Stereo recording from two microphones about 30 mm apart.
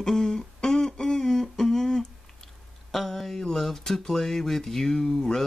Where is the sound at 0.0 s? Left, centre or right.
Centre.